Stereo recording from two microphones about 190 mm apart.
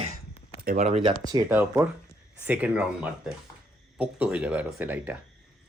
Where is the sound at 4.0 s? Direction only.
5° right (ahead or behind).